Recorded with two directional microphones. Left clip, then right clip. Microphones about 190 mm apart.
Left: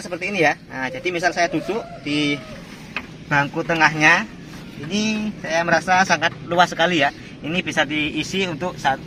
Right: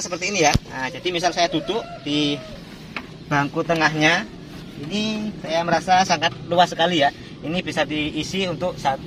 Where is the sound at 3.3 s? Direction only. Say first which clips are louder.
Left 1 dB; 20° right (ahead or behind).